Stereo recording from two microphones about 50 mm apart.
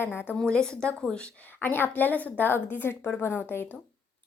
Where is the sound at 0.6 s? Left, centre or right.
Centre.